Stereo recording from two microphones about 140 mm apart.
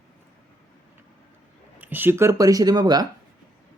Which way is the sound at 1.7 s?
15° right (ahead or behind).